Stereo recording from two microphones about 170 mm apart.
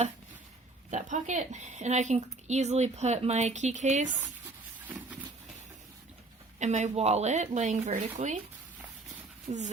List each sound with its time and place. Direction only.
0.9 s speech: 45° right (ahead or behind)
6.6 s speech: 45° right (ahead or behind)
9.5 s speech: 40° right (ahead or behind)